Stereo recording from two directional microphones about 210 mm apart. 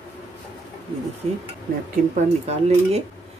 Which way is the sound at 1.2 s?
30° right (ahead or behind).